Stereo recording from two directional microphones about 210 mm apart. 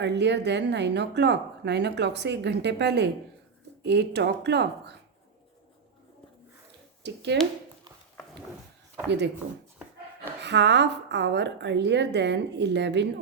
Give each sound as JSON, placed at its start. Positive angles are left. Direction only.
{"t": 0.0, "sound": "speech", "side_deg": -55}
{"t": 7.0, "sound": "speech", "side_deg": -55}
{"t": 9.0, "sound": "speech", "side_deg": -55}
{"t": 10.4, "sound": "speech", "side_deg": -55}